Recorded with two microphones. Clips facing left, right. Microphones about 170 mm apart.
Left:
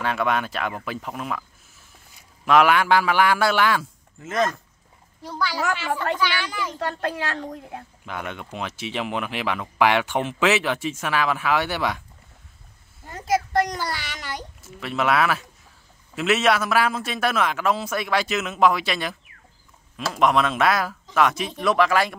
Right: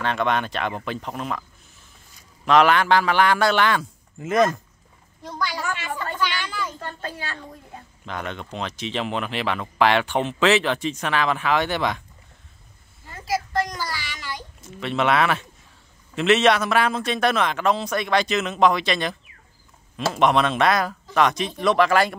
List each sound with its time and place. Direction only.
0.0 s a man's voice: 5° left (ahead or behind)
2.4 s speech: 10° left (ahead or behind)
4.2 s speech: 15° right (ahead or behind)
5.6 s a woman's voice: 85° left
6.1 s speech: 10° left (ahead or behind)
6.8 s a child's voice: 75° left (ahead or behind)
8.0 s speech: 10° left (ahead or behind)
13.9 s a sound: 55° left (ahead or behind)
14.6 s a man's voice: 5° left (ahead or behind)
20.2 s a man's voice: centre (ahead or behind)